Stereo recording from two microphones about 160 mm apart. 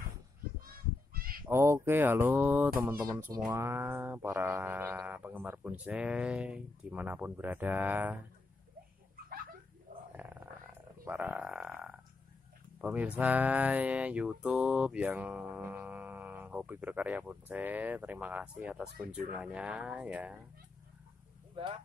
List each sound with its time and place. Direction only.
0.6 s honk: 65° right (ahead or behind)
1.4 s speech: 15° right (ahead or behind)
10.1 s purr: 10° right (ahead or behind)
11.1 s speech: 10° right (ahead or behind)